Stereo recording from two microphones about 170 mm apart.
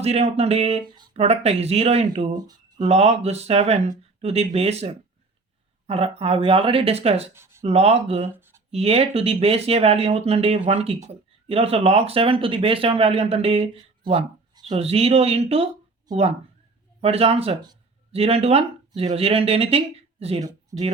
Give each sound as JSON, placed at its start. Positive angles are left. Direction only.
{"t": 0.0, "sound": "speech", "side_deg": -35}
{"t": 2.3, "sound": "speech", "side_deg": -25}
{"t": 2.7, "sound": "speech", "side_deg": -40}
{"t": 7.3, "sound": "a sound", "side_deg": -15}
{"t": 7.6, "sound": "speech", "side_deg": -35}
{"t": 8.4, "sound": "a sound", "side_deg": -15}
{"t": 8.7, "sound": "speech", "side_deg": -35}